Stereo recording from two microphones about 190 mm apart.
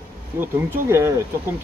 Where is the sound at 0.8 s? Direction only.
15° right (ahead or behind).